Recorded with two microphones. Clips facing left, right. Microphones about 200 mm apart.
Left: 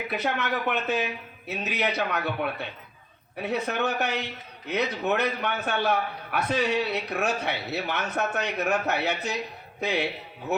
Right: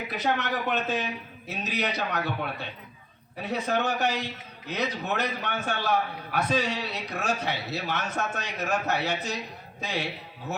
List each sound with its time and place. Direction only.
0.3 s a man's voice: 60° left (ahead or behind)